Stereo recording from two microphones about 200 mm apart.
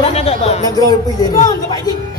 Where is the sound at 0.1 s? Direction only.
30° left (ahead or behind).